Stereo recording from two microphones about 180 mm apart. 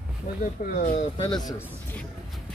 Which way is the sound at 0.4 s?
50° left (ahead or behind).